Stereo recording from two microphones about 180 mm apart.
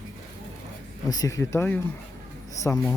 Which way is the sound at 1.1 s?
20° left (ahead or behind).